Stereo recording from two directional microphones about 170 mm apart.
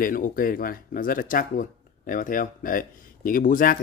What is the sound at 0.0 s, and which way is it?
Speech, 55° left (ahead or behind).